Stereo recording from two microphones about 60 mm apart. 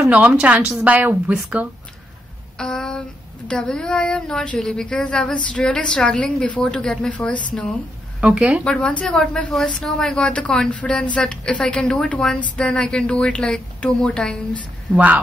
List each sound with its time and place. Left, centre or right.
0.0 s speech: centre
2.5 s a sound: centre
3.4 s speech: centre
8.2 s speech: right
8.6 s speech: centre